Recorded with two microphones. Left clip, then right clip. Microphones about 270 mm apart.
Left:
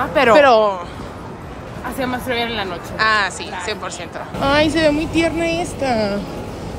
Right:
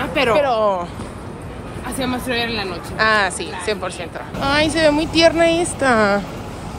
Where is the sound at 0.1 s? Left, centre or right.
Left.